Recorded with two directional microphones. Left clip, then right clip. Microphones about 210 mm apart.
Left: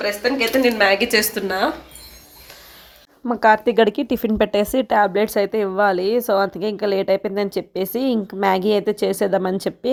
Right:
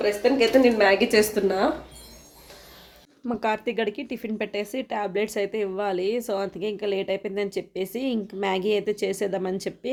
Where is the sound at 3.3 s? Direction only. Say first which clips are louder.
Left 11 dB; 25° left (ahead or behind).